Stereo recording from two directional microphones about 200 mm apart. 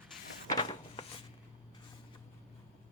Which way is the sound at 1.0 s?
30° left (ahead or behind).